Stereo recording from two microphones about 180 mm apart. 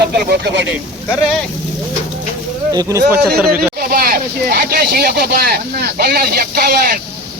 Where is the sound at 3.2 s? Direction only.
60° right (ahead or behind).